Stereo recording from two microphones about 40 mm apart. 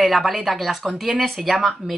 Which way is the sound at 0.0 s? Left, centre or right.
Centre.